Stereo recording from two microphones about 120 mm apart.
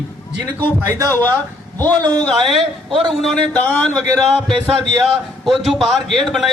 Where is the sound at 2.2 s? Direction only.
Centre (ahead or behind).